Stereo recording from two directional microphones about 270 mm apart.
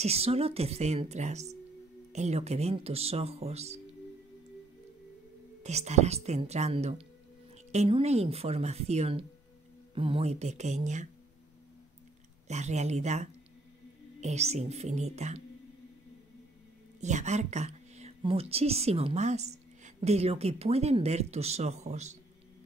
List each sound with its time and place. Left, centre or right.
0.0 s a woman's voice: right
5.6 s a woman's voice: right
12.4 s a woman's voice: right
17.0 s a woman's voice: right